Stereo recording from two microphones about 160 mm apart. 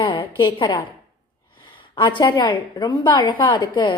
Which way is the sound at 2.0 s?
25° left (ahead or behind).